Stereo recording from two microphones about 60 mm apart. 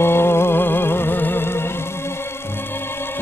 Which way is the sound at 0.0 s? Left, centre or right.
Left.